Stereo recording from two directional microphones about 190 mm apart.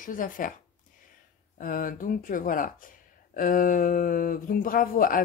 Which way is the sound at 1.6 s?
45° left (ahead or behind).